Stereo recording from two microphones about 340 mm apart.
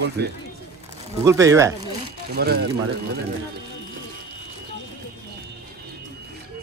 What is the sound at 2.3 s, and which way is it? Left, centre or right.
Speech, right.